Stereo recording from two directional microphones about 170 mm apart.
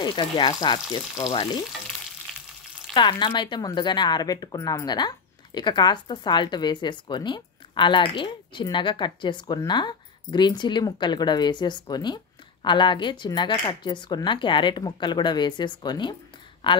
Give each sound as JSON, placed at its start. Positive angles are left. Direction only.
{"t": 0.0, "sound": "speech", "side_deg": 30}
{"t": 1.1, "sound": "frying", "side_deg": 40}
{"t": 2.9, "sound": "speech", "side_deg": 30}